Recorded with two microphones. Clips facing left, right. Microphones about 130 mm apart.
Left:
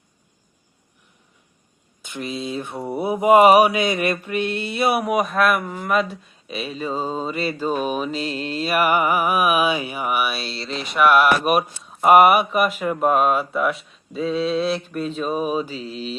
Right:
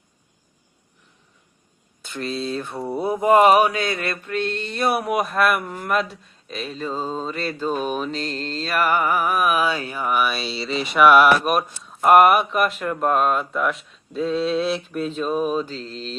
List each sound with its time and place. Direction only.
2.0 s a sound: 15° left (ahead or behind)
2.7 s mantra: centre (ahead or behind)
3.1 s mantra: 10° left (ahead or behind)